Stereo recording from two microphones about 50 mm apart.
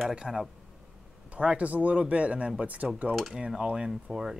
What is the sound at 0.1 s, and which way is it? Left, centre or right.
Speech, centre.